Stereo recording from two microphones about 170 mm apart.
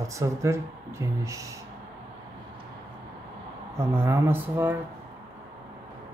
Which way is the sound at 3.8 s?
15° right (ahead or behind).